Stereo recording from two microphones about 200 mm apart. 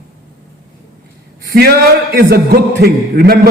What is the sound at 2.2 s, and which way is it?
A man's voice, 50° right (ahead or behind).